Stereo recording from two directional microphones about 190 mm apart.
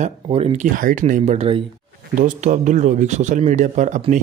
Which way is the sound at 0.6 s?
45° right (ahead or behind).